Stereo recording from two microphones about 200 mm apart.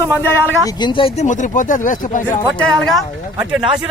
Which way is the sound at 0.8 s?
25° left (ahead or behind).